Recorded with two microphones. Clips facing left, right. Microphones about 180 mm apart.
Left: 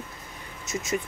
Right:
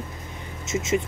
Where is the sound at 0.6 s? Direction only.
20° right (ahead or behind).